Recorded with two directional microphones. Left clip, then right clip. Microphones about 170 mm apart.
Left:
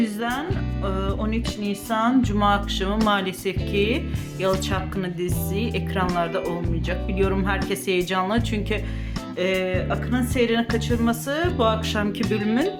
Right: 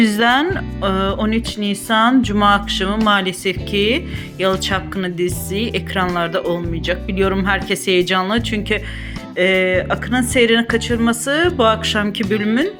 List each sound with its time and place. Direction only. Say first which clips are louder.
0.0 s speech: right 12 dB; 50° right (ahead or behind); by 8.8 s 20° right (ahead or behind)
9.4 s speech: right 9 dB; 30° right (ahead or behind)